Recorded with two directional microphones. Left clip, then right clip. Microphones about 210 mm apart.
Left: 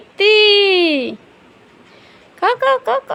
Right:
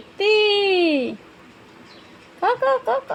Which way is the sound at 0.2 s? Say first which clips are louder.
Left 7 dB; 15° left (ahead or behind).